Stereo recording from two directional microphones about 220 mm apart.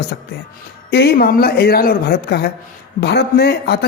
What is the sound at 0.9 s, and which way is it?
A man's voice, 45° left (ahead or behind).